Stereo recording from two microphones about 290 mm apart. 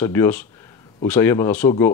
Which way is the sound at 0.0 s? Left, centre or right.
Centre.